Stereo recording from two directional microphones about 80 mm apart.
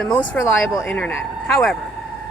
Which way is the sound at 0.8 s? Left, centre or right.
Centre.